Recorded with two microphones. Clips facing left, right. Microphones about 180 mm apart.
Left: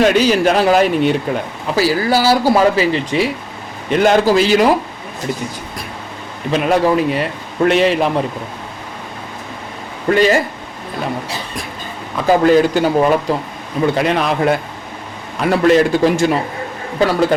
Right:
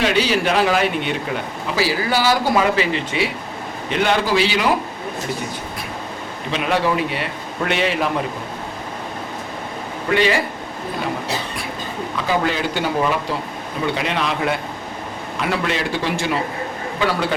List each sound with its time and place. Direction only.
0.0 s a man's voice: 45° left (ahead or behind)
6.5 s speech: 40° left (ahead or behind)
10.2 s a man's voice: 45° left (ahead or behind)
12.3 s a man's voice: 45° left (ahead or behind)